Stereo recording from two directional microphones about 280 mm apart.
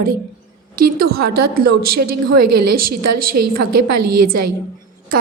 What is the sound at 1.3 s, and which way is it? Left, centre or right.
A woman's voice, right.